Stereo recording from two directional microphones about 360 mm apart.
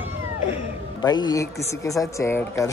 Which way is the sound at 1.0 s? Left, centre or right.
Centre.